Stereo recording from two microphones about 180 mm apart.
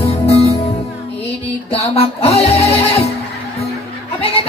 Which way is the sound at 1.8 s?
35° left (ahead or behind).